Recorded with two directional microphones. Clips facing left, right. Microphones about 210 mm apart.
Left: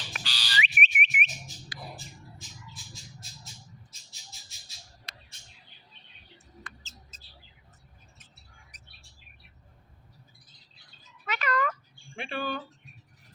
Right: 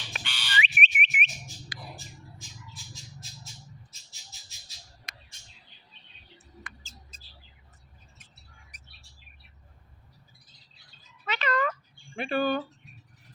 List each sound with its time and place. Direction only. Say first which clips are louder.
0.2 s whistle: right 2 dB; 35° left (ahead or behind)
0.6 s whistle: left 2 dB; 30° right (ahead or behind)
6.7 s bird: even; 15° right (ahead or behind)
8.7 s chirp: even; 10° right (ahead or behind)
11.3 s cat: right 1 dB; 25° right (ahead or behind)
12.1 s speech: right 7 dB; 45° right (ahead or behind)